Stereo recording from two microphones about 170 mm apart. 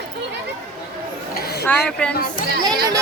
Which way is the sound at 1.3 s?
70° left (ahead or behind).